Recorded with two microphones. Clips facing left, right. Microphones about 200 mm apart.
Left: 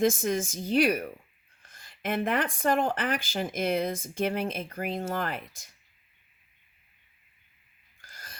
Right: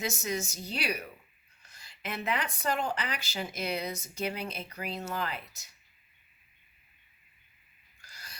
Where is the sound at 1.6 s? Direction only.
50° left (ahead or behind).